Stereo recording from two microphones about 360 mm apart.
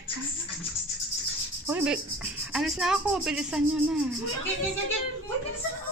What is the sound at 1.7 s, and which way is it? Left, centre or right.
A woman's voice, centre.